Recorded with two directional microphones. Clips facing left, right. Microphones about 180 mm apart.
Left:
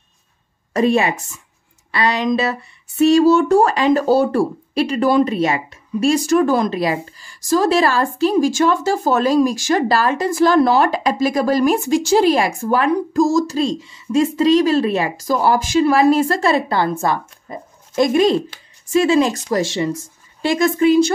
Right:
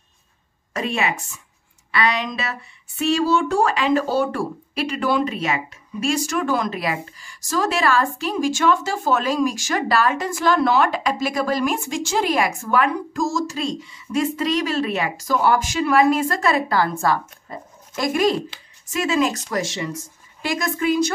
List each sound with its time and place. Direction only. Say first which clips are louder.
0.7 s speech: left 8 dB; 35° left (ahead or behind)